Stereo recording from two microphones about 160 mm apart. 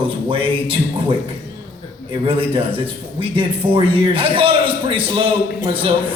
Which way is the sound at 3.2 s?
35° right (ahead or behind).